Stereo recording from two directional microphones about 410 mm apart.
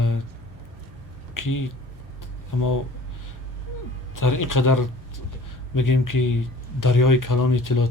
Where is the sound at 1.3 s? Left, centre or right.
Left.